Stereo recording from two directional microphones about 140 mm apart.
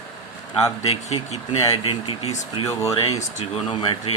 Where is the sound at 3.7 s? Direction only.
40° left (ahead or behind).